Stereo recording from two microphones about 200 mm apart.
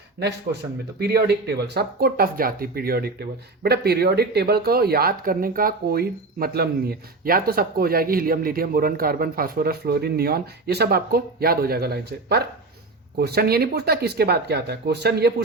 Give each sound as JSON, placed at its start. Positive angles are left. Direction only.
{"t": 0.2, "sound": "speech", "side_deg": -55}